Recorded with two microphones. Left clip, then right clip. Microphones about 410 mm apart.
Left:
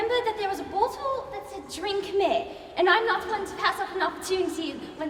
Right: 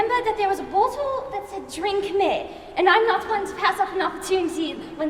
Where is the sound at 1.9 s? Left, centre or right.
Right.